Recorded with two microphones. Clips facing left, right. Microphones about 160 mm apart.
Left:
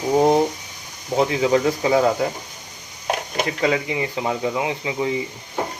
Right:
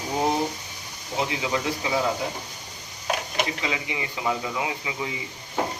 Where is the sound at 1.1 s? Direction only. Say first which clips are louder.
Left 9 dB; 45° left (ahead or behind).